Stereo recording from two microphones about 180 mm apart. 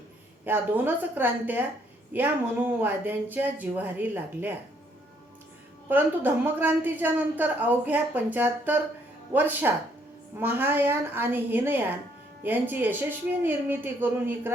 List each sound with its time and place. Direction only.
0.4 s a woman's voice: 10° right (ahead or behind)
2.8 s a woman's voice: 10° right (ahead or behind)
5.9 s a woman's voice: 10° right (ahead or behind)